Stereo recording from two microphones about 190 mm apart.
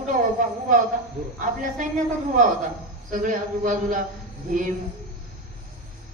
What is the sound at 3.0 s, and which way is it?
Speech, 45° right (ahead or behind).